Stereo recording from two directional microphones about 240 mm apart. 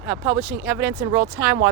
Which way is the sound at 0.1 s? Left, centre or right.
Centre.